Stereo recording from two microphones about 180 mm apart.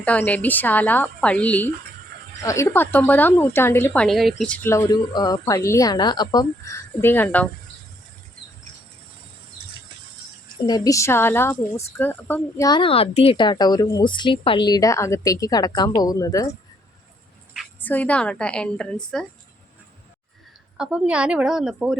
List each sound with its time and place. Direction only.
0.0 s speech: 10° left (ahead or behind)
10.7 s speech: 20° left (ahead or behind)
12.6 s speech: 25° left (ahead or behind)
17.7 s a woman's voice: 10° left (ahead or behind)
20.7 s a woman's voice: 5° right (ahead or behind)